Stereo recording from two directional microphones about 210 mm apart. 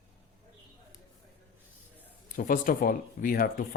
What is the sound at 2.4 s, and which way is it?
Speech, 40° left (ahead or behind).